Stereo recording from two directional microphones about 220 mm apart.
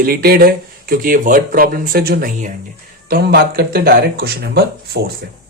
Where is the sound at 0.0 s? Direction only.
45° right (ahead or behind).